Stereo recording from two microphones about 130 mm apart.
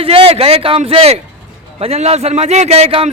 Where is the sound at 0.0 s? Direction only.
45° right (ahead or behind).